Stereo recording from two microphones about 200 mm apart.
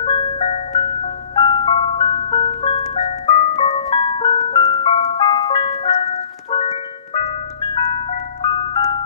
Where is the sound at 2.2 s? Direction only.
30° left (ahead or behind).